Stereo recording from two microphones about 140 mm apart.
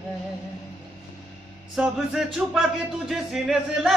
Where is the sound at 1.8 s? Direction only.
5° right (ahead or behind).